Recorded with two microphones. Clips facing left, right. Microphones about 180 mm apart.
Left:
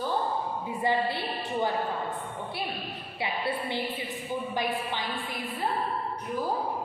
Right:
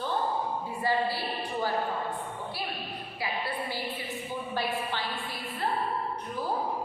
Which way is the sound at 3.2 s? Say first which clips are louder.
Left 3 dB; 25° left (ahead or behind).